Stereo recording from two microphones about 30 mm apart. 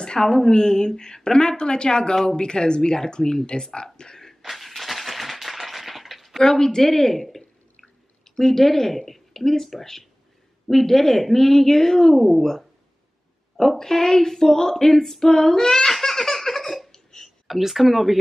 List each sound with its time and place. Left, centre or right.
0.0 s a woman's voice: left
3.7 s a sound: left
4.5 s a sound: centre
6.4 s a woman's voice: left
8.4 s speech: centre
13.7 s female singing: centre
16.9 s hiccup: centre
17.5 s speech: centre